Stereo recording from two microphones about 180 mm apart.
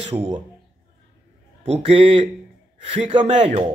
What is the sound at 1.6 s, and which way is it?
Speech, 35° right (ahead or behind).